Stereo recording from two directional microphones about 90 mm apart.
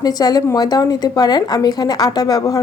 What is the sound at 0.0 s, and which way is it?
A woman's voice, 45° left (ahead or behind).